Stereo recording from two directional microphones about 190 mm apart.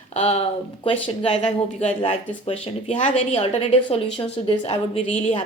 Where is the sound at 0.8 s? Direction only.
30° left (ahead or behind).